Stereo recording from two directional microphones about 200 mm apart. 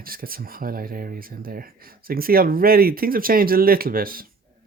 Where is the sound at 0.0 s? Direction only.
45° right (ahead or behind).